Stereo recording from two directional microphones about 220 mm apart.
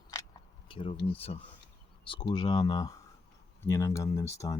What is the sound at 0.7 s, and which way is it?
Speech, 25° left (ahead or behind).